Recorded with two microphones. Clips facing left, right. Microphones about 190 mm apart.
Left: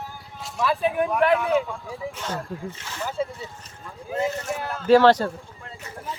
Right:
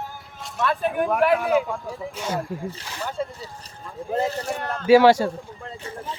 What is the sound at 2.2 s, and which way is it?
Speech, 10° right (ahead or behind).